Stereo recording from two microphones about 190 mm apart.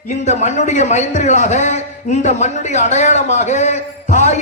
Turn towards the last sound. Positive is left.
turn(degrees=35)  # may be behind; listen again after turning